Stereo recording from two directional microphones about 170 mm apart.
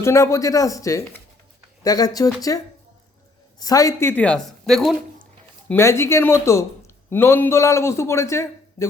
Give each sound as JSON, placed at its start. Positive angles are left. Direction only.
{"t": 0.0, "sound": "speech", "side_deg": 15}
{"t": 3.6, "sound": "a man's voice", "side_deg": 20}